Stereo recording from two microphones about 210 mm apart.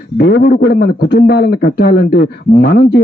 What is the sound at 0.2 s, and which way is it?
A man's voice, 50° left (ahead or behind).